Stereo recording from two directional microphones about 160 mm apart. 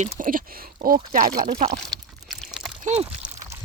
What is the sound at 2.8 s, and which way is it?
Speech, 45° right (ahead or behind).